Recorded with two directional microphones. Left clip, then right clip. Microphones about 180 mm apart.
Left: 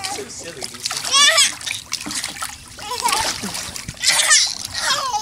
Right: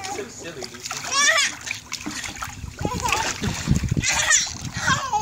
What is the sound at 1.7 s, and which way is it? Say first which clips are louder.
Trickle: left 4 dB; centre (ahead or behind).